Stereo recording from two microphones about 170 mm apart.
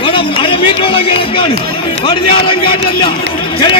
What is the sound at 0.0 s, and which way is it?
Music, 30° left (ahead or behind).